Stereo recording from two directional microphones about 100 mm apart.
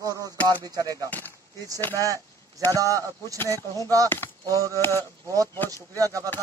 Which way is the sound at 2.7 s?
35° right (ahead or behind).